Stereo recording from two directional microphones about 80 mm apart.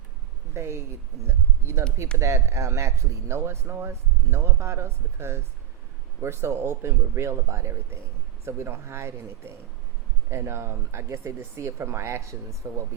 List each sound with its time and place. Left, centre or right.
0.5 s speech: right